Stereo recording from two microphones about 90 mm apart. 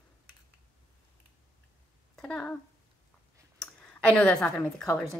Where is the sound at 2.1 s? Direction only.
10° left (ahead or behind).